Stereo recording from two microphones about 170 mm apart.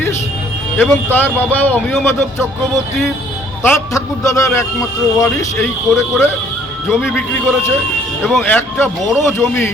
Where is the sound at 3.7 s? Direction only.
15° left (ahead or behind).